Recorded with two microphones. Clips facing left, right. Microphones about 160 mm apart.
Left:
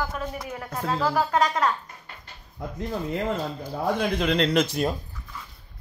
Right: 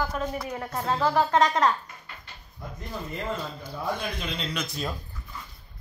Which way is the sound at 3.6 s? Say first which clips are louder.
Left 6 dB; 85° left.